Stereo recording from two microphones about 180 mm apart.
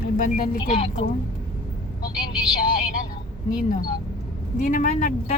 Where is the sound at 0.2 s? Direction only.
50° left (ahead or behind).